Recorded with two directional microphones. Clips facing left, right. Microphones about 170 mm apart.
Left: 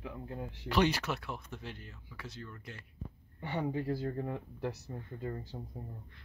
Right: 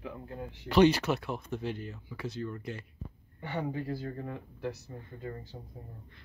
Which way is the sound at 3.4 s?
25° left (ahead or behind).